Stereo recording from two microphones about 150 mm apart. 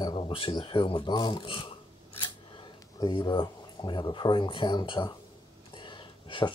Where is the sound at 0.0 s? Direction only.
35° left (ahead or behind).